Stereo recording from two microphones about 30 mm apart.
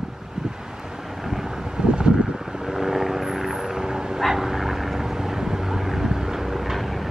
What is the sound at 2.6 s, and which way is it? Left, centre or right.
Vehicle, centre.